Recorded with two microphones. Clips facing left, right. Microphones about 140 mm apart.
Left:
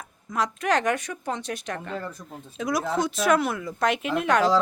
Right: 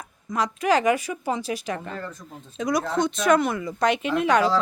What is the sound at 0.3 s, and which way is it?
Speech, centre (ahead or behind).